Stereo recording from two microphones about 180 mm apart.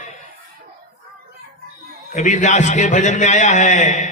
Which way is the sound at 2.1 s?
40° left (ahead or behind).